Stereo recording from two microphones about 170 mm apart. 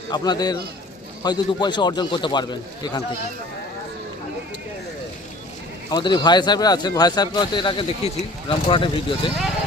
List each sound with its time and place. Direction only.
0.1 s speech: 25° left (ahead or behind)
5.9 s speech: 25° left (ahead or behind)